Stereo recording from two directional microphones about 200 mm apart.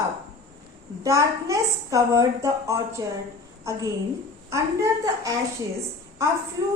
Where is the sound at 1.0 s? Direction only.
15° right (ahead or behind).